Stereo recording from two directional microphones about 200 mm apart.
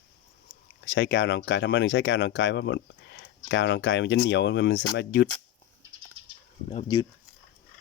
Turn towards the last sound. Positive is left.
turn(degrees=20)  # may be behind; listen again after turning